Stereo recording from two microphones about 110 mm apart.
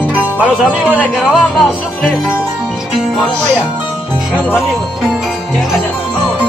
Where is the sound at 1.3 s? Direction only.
Centre (ahead or behind).